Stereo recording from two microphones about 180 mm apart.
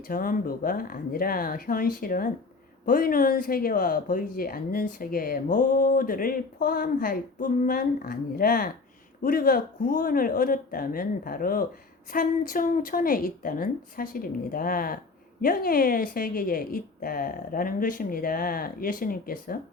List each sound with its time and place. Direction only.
0.1 s speech: 50° left (ahead or behind)